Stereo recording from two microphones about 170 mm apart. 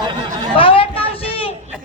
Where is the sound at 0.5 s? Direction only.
30° left (ahead or behind).